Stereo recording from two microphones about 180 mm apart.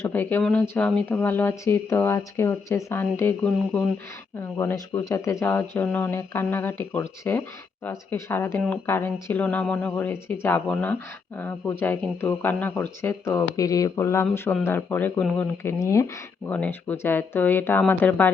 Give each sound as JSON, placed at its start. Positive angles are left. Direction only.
{"t": 0.0, "sound": "speech", "side_deg": 10}